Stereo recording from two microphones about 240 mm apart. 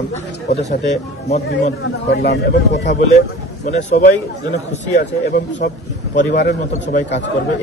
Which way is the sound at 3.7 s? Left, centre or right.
Left.